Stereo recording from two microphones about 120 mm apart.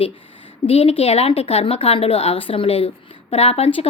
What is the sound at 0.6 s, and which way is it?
A woman's voice, 50° left (ahead or behind).